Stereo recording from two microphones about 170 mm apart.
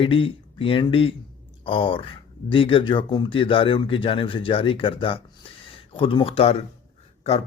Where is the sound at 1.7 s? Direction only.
30° left (ahead or behind).